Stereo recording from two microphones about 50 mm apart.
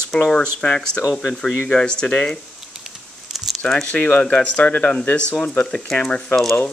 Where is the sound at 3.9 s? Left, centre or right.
Left.